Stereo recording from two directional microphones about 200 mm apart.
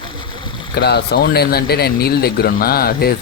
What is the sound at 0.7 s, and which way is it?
Speech, 55° left (ahead or behind).